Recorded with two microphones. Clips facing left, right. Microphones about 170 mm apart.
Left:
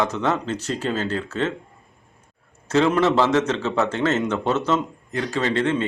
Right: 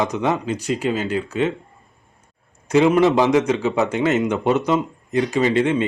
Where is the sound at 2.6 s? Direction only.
15° right (ahead or behind).